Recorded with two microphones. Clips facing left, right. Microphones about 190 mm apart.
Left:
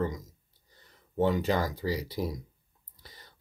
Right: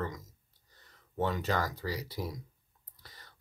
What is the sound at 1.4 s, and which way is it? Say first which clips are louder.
Speech: left 4 dB; 30° left (ahead or behind).